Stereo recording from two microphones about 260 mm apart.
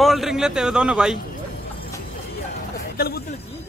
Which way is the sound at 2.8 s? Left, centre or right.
Left.